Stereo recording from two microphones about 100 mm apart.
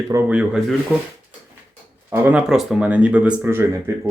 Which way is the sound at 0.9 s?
10° right (ahead or behind).